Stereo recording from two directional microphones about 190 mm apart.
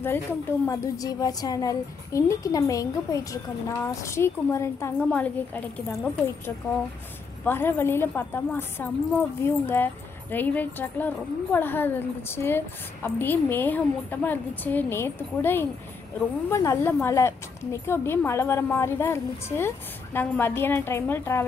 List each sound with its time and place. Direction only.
0.0 s a woman's voice: 10° left (ahead or behind)
7.4 s a woman's voice: 10° left (ahead or behind)